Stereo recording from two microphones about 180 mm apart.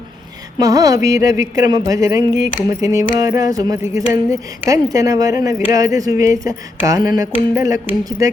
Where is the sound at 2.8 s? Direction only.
20° right (ahead or behind).